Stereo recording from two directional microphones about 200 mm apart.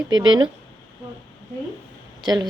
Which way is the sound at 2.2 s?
20° right (ahead or behind).